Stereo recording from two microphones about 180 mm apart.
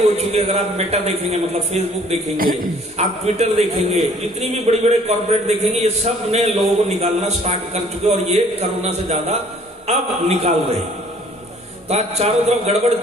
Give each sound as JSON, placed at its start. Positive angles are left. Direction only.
{"t": 0.2, "sound": "a man's voice", "side_deg": -35}
{"t": 2.3, "sound": "a man's voice", "side_deg": -55}
{"t": 3.0, "sound": "a man's voice", "side_deg": -40}
{"t": 11.9, "sound": "a man's voice", "side_deg": -35}